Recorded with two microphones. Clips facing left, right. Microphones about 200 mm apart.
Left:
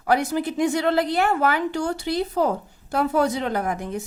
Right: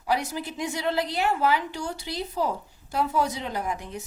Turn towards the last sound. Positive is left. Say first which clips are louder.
# left 5 dB
turn(degrees=50)  # may be behind; listen again after turning